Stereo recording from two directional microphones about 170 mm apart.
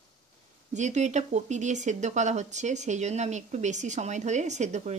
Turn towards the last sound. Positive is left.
turn(degrees=-45)  # may be behind; listen again after turning